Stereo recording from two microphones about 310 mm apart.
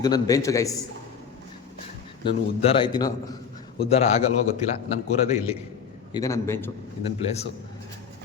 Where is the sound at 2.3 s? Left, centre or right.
Centre.